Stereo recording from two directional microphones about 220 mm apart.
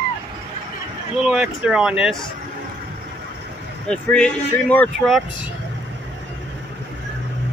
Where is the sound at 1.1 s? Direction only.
5° right (ahead or behind).